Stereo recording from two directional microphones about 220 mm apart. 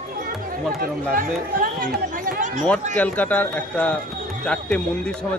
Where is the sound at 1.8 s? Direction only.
35° right (ahead or behind).